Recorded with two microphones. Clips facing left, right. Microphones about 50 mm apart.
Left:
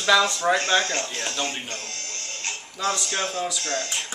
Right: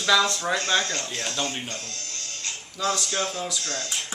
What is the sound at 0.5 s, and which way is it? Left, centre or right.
Speech, left.